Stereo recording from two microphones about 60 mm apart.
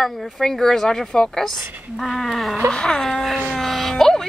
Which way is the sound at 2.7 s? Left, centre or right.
Centre.